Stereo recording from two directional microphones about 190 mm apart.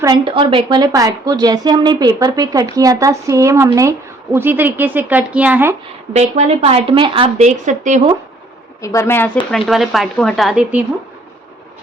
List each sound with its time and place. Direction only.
0.0 s a woman's voice: 25° right (ahead or behind)
6.1 s speech: 35° right (ahead or behind)
8.8 s a woman's voice: 15° left (ahead or behind)
9.5 s speech: centre (ahead or behind)